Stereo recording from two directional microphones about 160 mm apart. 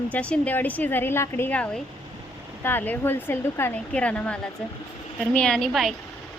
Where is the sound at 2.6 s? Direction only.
10° left (ahead or behind).